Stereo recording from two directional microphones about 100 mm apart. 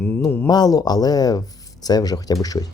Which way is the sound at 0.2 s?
40° left (ahead or behind).